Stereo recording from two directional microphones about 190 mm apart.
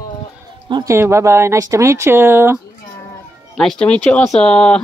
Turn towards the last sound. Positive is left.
turn(degrees=5)  # may be behind; listen again after turning